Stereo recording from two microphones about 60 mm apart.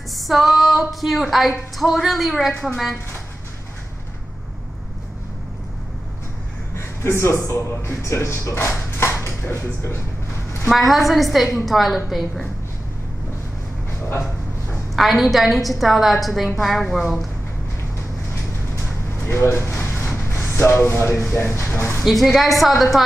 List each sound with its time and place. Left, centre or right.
0.1 s a sound: centre
1.8 s a woman's voice: centre
7.0 s speech: left
10.7 s a woman's voice: centre
15.0 s a woman's voice: centre
19.2 s speech: left
22.0 s a woman's voice: centre